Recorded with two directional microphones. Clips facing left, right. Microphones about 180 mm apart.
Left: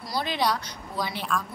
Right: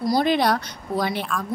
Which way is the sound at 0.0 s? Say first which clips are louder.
Right 8 dB; 50° right (ahead or behind).